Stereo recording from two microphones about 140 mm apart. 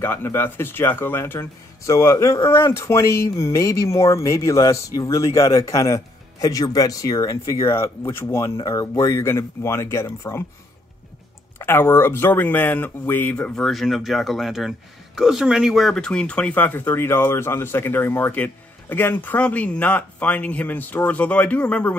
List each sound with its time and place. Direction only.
0.0 s speech: 15° left (ahead or behind)
11.5 s speech: 15° left (ahead or behind)